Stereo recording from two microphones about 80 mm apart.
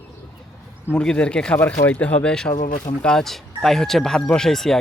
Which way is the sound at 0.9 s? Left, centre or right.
Centre.